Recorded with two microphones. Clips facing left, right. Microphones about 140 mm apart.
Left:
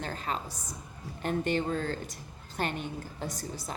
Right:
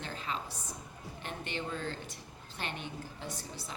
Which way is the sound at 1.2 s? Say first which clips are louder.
Left 11 dB; 45° left (ahead or behind).